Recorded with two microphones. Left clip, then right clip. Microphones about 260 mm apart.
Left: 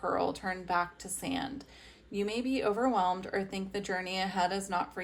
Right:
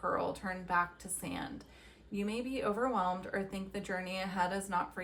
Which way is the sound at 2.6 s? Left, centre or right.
Centre.